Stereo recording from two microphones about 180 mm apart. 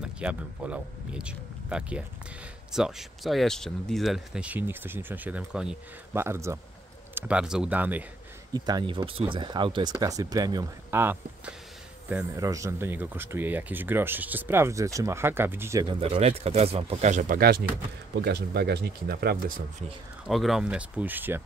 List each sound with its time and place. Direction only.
0.0 s speech: 5° right (ahead or behind)
6.2 s a man's voice: 15° right (ahead or behind)
8.5 s a man's voice: 20° right (ahead or behind)
16.0 s speech: 35° right (ahead or behind); by 17.6 s 55° right (ahead or behind)
18.1 s speech: 65° right (ahead or behind)
20.2 s a man's voice: centre (ahead or behind)